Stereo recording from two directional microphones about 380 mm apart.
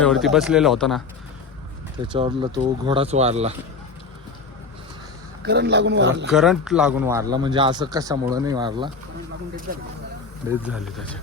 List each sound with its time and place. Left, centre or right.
0.0 s speech: centre
2.1 s speech: centre
5.4 s a man's voice: right
6.2 s speech: centre
10.7 s speech: centre